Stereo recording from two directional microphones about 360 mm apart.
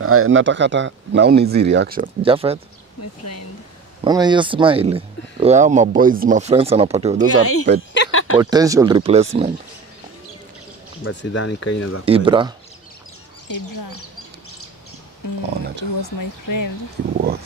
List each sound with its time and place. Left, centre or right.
0.0 s speech: right; by 2.6 s centre
4.0 s speech: centre
7.3 s speech: left
7.9 s a sound: left
8.4 s speech: centre
11.1 s speech: left
12.1 s speech: centre
16.0 s speech: left